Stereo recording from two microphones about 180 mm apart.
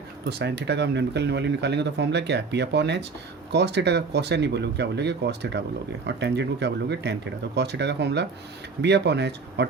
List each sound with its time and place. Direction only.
0.3 s speech: 70° right (ahead or behind)